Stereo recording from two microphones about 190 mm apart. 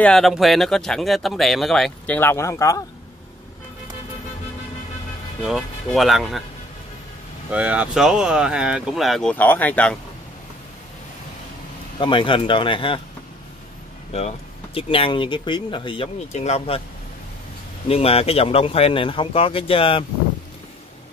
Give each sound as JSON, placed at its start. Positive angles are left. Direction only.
{"t": 0.0, "sound": "speech", "side_deg": 0}
{"t": 5.4, "sound": "speech", "side_deg": 0}
{"t": 7.5, "sound": "speech", "side_deg": -5}
{"t": 12.0, "sound": "speech", "side_deg": 25}
{"t": 14.1, "sound": "speech", "side_deg": 30}
{"t": 17.8, "sound": "speech", "side_deg": 30}